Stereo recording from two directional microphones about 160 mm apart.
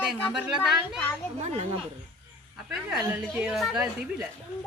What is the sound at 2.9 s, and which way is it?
A woman's voice, centre (ahead or behind).